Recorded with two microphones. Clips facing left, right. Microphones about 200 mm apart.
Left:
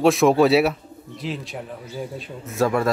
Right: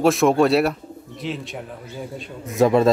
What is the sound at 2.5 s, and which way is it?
Speech, 20° right (ahead or behind).